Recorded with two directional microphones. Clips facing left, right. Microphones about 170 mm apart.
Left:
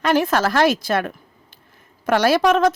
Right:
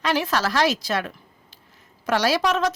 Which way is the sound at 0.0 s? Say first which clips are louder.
Left 5 dB; 50° left (ahead or behind).